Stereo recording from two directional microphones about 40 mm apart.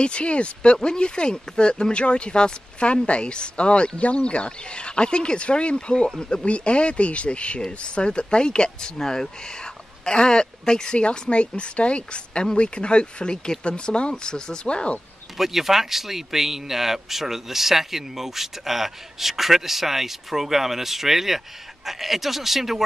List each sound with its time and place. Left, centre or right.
0.0 s speech: left
15.3 s speech: centre